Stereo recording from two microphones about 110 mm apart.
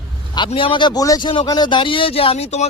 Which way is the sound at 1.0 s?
35° left (ahead or behind).